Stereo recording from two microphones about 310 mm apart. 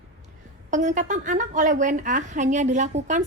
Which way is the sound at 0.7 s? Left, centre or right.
Right.